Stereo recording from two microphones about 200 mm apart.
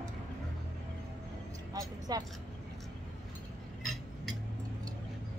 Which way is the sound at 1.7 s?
20° right (ahead or behind).